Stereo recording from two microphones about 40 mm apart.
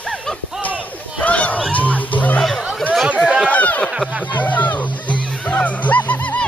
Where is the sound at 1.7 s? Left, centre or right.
Left.